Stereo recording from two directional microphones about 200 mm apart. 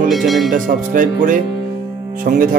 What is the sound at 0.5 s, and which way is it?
Speech, 40° right (ahead or behind).